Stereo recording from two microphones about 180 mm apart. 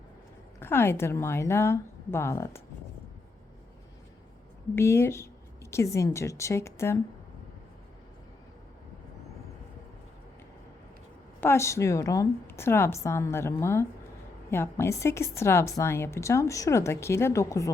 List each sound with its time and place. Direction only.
0.6 s a woman's voice: 15° left (ahead or behind)
4.7 s a woman's voice: 15° left (ahead or behind)
11.3 s a woman's voice: 15° left (ahead or behind)